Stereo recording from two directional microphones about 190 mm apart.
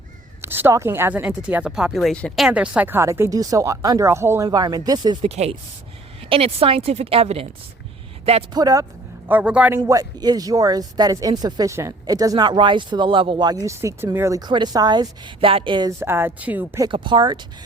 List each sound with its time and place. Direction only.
0.4 s speech: 10° right (ahead or behind)
5.3 s a woman's voice: 35° right (ahead or behind)
8.5 s speech: 20° right (ahead or behind)
9.3 s speech: 5° right (ahead or behind)
16.9 s speech: 25° right (ahead or behind)